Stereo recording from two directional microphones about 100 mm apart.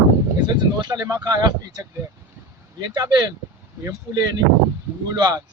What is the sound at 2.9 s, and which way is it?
Speech, 45° right (ahead or behind).